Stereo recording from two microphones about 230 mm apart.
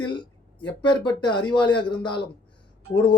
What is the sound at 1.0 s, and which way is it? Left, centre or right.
Speech, centre.